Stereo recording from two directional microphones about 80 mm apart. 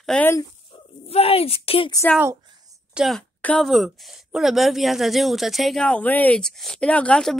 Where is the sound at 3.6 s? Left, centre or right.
Centre.